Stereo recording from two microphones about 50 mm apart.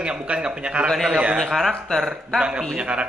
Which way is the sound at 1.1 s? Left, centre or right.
Centre.